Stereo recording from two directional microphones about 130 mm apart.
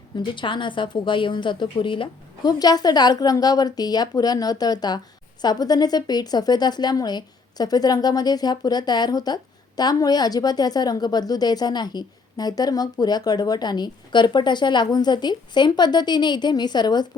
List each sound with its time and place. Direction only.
0.2 s a woman's voice: 40° left (ahead or behind)